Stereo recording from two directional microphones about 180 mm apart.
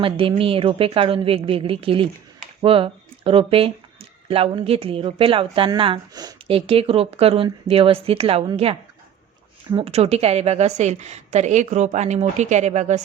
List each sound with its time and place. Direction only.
0.0 s speech: 30° right (ahead or behind)
9.7 s speech: 35° right (ahead or behind)